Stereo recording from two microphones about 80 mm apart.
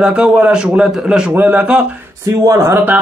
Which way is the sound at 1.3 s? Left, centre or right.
Right.